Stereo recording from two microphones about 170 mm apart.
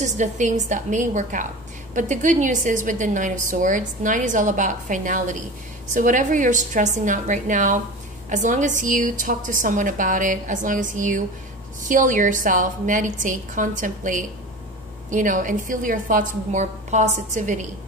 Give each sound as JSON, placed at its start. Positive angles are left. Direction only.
{"t": 0.0, "sound": "a woman's voice", "side_deg": -45}